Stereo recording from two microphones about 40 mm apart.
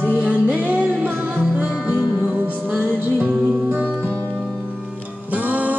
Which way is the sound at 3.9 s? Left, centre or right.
Right.